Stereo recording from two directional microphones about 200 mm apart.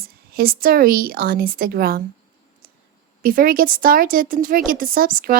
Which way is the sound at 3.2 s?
45° right (ahead or behind).